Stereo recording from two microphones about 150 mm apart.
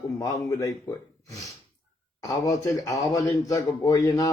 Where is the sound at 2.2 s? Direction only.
20° left (ahead or behind).